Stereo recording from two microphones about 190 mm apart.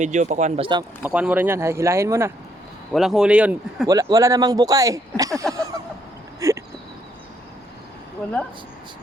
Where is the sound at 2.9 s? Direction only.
Centre (ahead or behind).